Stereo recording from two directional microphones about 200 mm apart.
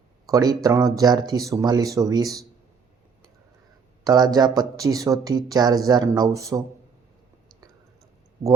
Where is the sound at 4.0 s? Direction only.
20° right (ahead or behind).